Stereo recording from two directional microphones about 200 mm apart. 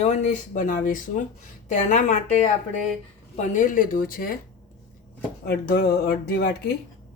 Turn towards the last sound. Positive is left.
turn(degrees=50)  # may be behind; listen again after turning